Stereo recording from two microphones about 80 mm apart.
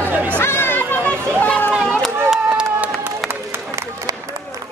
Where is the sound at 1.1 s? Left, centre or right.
Centre.